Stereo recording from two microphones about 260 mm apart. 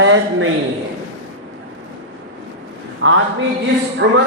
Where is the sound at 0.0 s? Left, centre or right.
Right.